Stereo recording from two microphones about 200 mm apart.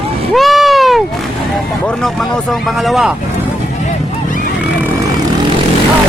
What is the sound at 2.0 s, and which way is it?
Speech, centre (ahead or behind).